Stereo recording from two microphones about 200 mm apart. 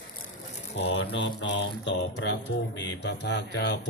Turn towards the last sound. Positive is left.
turn(degrees=60)  # may be behind; listen again after turning